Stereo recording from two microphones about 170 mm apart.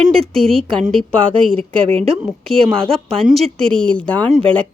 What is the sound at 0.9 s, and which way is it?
A woman's voice, 30° right (ahead or behind).